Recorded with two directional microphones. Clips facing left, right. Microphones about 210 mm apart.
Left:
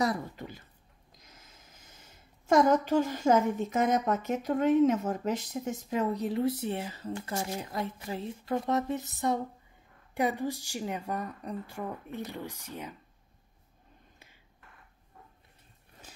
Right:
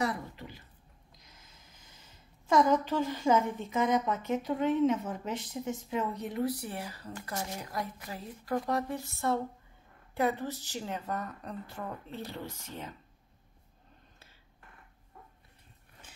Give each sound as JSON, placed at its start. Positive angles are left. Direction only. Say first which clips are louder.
{"t": 0.0, "sound": "speech", "louder": "left 3 dB", "side_deg": 40}
{"t": 2.0, "sound": "a woman's voice", "louder": "left 1 dB", "side_deg": 45}